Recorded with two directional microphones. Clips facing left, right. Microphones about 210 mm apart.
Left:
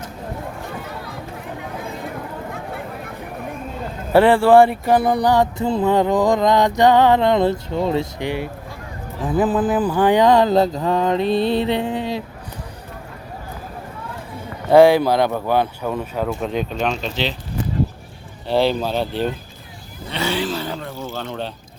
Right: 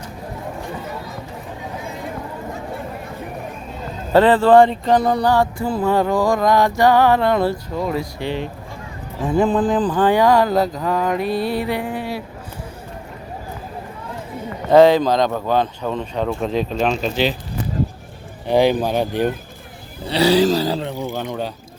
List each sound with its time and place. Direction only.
4.1 s a sound: 10° left (ahead or behind)
8.2 s speech: 15° left (ahead or behind)
9.2 s a sound: centre (ahead or behind); by 12.2 s 20° left (ahead or behind)
14.7 s speech: 10° left (ahead or behind); by 17.3 s 10° right (ahead or behind)
18.4 s speech: 15° right (ahead or behind)
20.1 s speech: 35° right (ahead or behind)
20.8 s speech: 15° right (ahead or behind)